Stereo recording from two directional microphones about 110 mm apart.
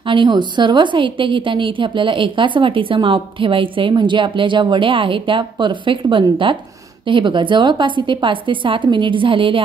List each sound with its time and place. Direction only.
0.0 s a woman's voice: 50° right (ahead or behind)